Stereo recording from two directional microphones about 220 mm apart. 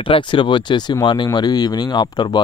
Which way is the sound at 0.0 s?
20° left (ahead or behind).